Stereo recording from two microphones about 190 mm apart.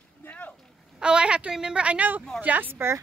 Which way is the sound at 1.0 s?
5° right (ahead or behind).